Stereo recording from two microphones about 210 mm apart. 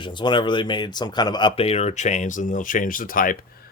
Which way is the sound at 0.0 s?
20° left (ahead or behind).